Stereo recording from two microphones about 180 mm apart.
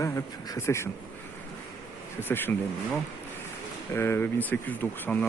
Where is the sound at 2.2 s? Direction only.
10° left (ahead or behind).